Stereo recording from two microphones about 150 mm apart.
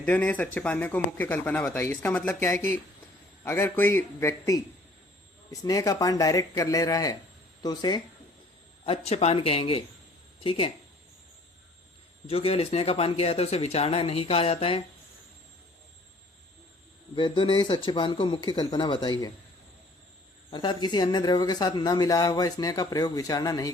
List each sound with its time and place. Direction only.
0.0 s speech: 10° left (ahead or behind)
8.8 s speech: 40° left (ahead or behind)
12.3 s speech: 40° left (ahead or behind)
17.2 s speech: 35° left (ahead or behind)
20.5 s speech: 30° left (ahead or behind)